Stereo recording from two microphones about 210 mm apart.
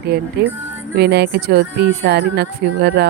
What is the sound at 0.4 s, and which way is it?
Speech, 50° right (ahead or behind).